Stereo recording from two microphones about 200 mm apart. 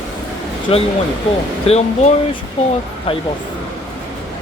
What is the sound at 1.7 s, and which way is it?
Speech, 35° left (ahead or behind).